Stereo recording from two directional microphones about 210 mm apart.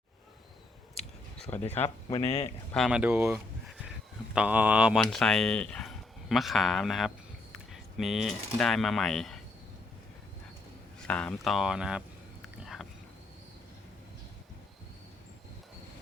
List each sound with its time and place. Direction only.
0.9 s a sound: 5° left (ahead or behind)
1.7 s speech: 10° left (ahead or behind)
2.1 s speech: 30° left (ahead or behind)
2.7 s speech: 5° right (ahead or behind)
11.0 s speech: 5° left (ahead or behind)
12.6 s a sound: centre (ahead or behind)